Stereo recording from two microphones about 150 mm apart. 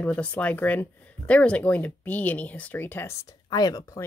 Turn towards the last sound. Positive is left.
turn(degrees=25)  # may be behind; listen again after turning